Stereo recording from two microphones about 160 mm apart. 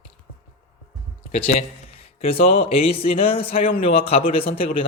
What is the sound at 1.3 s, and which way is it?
A man's voice, 40° left (ahead or behind).